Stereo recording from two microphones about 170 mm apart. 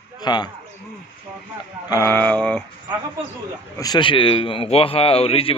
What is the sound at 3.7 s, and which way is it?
A man's voice, 25° left (ahead or behind).